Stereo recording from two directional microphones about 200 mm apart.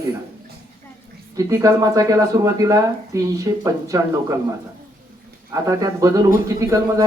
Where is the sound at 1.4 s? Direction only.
15° right (ahead or behind).